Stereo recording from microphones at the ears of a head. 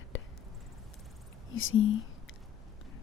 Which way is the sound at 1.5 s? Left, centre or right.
Left.